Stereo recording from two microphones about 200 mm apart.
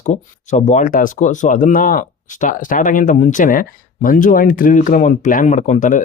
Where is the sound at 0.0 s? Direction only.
35° left (ahead or behind).